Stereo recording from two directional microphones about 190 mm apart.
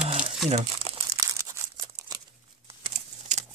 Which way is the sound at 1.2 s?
15° right (ahead or behind).